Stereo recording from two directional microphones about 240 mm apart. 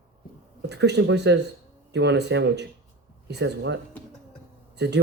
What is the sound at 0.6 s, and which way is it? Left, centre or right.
Speech, right.